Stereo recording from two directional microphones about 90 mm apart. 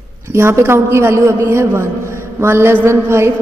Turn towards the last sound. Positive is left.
turn(degrees=-30)  # may be behind; listen again after turning